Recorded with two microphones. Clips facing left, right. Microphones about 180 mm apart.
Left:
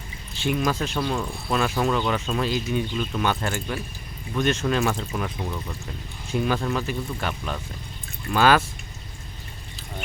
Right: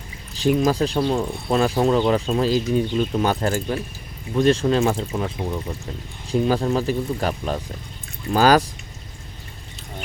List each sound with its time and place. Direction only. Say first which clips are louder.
0.3 s speech: right 6 dB; 35° right (ahead or behind)